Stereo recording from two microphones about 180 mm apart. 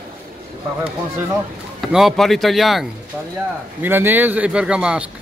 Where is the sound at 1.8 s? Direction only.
Centre (ahead or behind).